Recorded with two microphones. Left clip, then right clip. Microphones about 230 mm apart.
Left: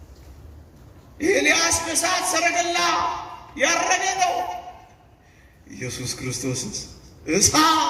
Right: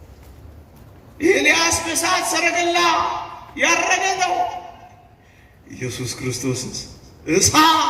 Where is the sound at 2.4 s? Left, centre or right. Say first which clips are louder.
Right 3 dB; centre.